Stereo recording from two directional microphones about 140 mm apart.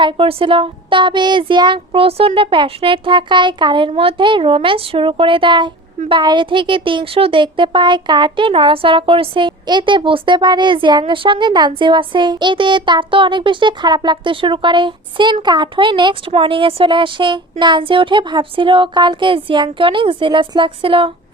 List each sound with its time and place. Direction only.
0.0 s speech: 40° right (ahead or behind)